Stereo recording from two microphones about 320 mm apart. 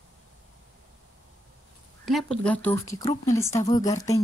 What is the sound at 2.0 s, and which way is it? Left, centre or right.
Speech, centre.